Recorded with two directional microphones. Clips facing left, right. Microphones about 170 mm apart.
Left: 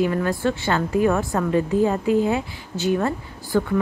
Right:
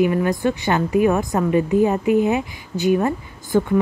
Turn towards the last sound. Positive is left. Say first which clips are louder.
# right 3 dB
turn(degrees=-15)  # may be behind; listen again after turning